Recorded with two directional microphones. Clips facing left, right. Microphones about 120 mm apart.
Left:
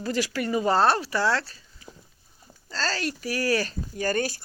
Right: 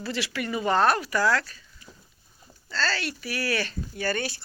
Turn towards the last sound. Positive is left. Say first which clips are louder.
# left 3 dB
turn(degrees=45)  # may be behind; listen again after turning